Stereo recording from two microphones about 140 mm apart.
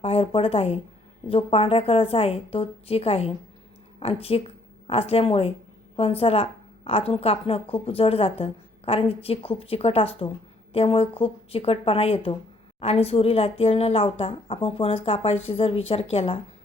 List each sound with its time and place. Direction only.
0.0 s a woman's voice: 45° left (ahead or behind)